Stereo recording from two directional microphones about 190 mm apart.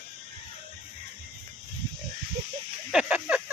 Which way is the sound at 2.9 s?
5° right (ahead or behind).